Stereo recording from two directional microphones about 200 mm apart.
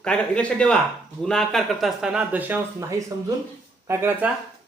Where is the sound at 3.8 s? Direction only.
10° right (ahead or behind).